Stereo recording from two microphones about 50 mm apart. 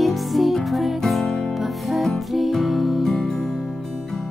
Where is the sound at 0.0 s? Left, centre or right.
Centre.